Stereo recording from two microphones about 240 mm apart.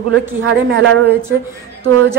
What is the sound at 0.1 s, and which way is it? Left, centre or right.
Speech, right.